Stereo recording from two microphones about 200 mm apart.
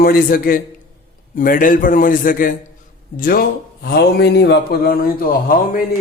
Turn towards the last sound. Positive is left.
turn(degrees=45)  # may be behind; listen again after turning